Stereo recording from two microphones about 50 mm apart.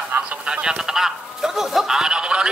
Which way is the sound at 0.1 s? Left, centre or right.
Right.